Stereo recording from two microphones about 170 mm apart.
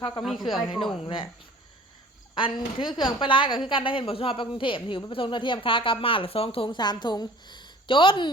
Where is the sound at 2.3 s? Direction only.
30° left (ahead or behind).